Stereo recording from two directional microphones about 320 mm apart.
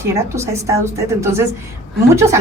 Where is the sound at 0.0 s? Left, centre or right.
Centre.